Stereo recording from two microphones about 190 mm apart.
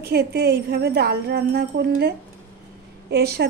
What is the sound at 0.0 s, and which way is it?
A woman's voice, 60° right (ahead or behind).